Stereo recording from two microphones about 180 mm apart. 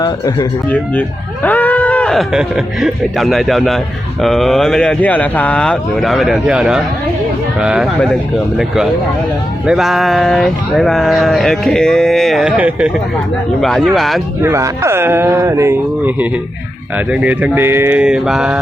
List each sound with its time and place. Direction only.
0.0 s speech: 25° left (ahead or behind)
1.5 s speech: 10° left (ahead or behind)
14.4 s speech: 15° right (ahead or behind)